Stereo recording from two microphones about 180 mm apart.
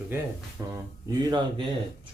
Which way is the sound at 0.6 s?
15° right (ahead or behind).